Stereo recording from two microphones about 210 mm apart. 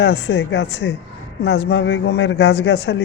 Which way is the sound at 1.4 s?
75° left (ahead or behind).